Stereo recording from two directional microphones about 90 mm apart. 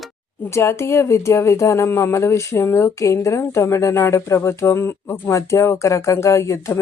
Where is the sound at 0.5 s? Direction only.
30° left (ahead or behind).